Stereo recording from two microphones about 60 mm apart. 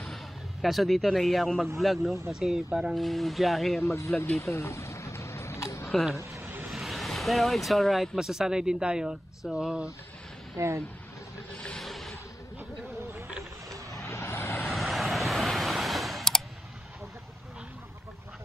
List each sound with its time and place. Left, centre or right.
0.0 s speech: centre
3.8 s speech: left
4.4 s a sound: left
5.9 s speech: centre
6.4 s vehicle: right
6.7 s speech: centre
10.6 s speech: right
11.5 s boat: centre
11.8 s a sound: centre
14.0 s vehicle: left
14.7 s vehicle: centre